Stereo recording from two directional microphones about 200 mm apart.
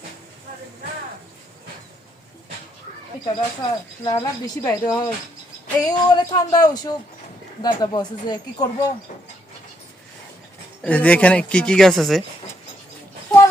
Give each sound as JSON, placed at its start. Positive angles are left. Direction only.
{"t": 3.2, "sound": "speech", "side_deg": 20}
{"t": 10.8, "sound": "speech", "side_deg": 5}